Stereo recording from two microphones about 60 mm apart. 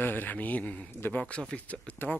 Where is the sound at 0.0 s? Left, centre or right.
Left.